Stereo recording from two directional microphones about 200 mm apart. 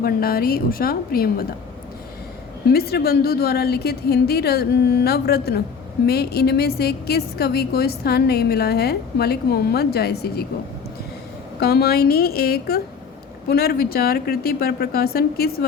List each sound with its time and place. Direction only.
0.0 s a woman's voice: 50° left (ahead or behind)
2.6 s a woman's voice: 50° left (ahead or behind)
11.6 s a woman's voice: 50° left (ahead or behind)